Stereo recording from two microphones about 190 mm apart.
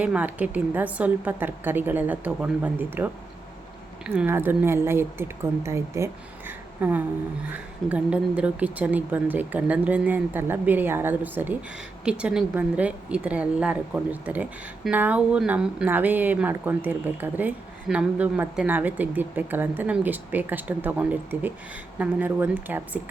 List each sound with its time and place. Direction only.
0.0 s speech: 5° right (ahead or behind)